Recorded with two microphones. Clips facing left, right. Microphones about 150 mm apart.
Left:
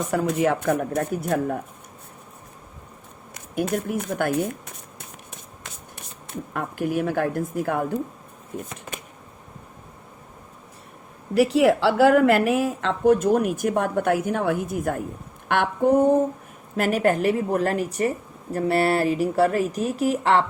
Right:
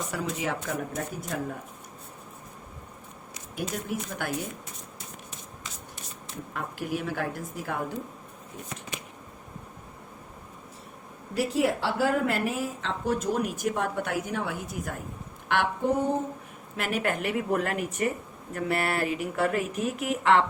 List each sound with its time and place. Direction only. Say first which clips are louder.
0.1 s a woman's voice: left 12 dB; 55° left (ahead or behind)
3.3 s a sound: left 9 dB; 55° left (ahead or behind)
6.5 s a woman's voice: left 7 dB; 50° left (ahead or behind)
11.3 s a woman's voice: left 8 dB; 90° left; by 16.0 s 50° left (ahead or behind)
16.7 s speech: left 8 dB; 40° left (ahead or behind)